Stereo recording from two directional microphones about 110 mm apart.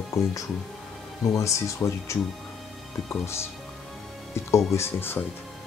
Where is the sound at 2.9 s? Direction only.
Centre (ahead or behind).